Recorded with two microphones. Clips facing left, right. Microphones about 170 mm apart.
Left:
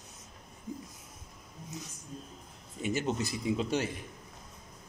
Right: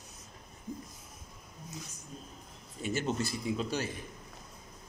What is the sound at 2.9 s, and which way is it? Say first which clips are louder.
A man's voice: left 1 dB; 15° left (ahead or behind).